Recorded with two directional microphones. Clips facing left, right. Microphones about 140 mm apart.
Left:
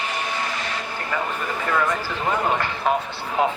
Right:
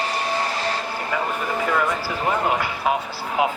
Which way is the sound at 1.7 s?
5° right (ahead or behind).